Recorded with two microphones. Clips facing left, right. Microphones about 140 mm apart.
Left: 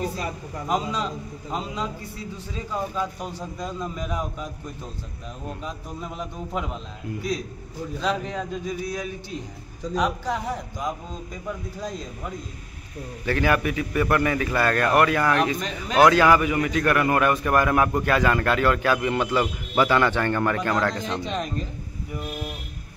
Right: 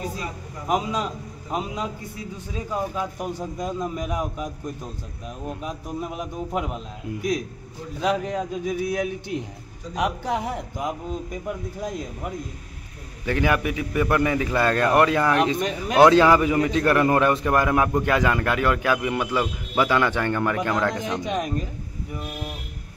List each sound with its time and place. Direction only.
2.5 s a man's voice: 10° right (ahead or behind)
5.5 s a man's voice: 10° right (ahead or behind)
8.0 s a man's voice: 10° right (ahead or behind)
9.3 s a man's voice: 75° right (ahead or behind)
9.9 s a man's voice: 15° right (ahead or behind)
13.2 s a man's voice: 15° right (ahead or behind)